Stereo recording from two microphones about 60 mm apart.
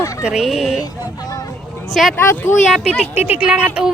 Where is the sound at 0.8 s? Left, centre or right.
Left.